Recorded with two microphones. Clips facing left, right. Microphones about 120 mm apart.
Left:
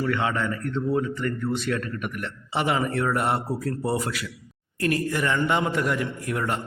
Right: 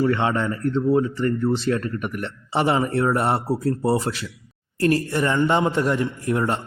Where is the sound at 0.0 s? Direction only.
30° right (ahead or behind).